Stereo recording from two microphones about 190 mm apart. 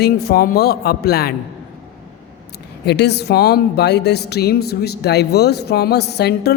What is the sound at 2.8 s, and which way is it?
Speech, 60° left (ahead or behind).